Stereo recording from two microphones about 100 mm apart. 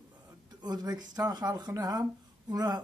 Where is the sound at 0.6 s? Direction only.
40° right (ahead or behind).